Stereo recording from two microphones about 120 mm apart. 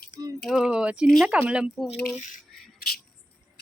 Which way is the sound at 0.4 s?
5° right (ahead or behind).